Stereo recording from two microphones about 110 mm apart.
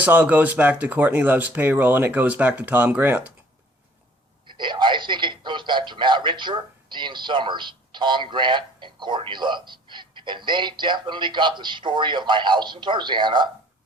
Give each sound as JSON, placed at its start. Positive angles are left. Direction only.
{"t": 0.0, "sound": "speech", "side_deg": -15}
{"t": 4.5, "sound": "speech", "side_deg": -45}